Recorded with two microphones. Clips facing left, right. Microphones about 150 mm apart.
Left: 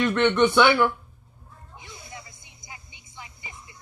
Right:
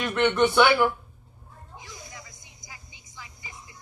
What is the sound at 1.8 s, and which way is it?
Vehicle, 25° left (ahead or behind).